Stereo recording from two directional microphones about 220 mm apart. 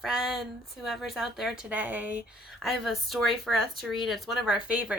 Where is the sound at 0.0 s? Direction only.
Centre (ahead or behind).